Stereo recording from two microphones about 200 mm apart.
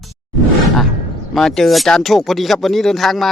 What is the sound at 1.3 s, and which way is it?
Speech, centre (ahead or behind).